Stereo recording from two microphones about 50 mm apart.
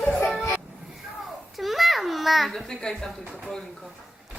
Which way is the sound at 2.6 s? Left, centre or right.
Centre.